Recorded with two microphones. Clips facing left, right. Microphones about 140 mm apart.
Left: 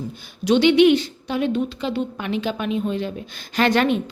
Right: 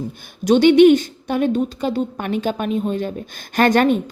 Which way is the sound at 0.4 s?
45° right (ahead or behind).